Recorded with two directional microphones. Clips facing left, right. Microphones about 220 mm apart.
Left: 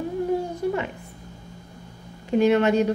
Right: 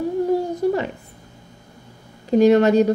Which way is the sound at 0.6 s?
40° right (ahead or behind).